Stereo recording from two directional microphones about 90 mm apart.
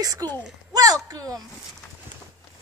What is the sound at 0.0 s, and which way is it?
Speech, 40° right (ahead or behind).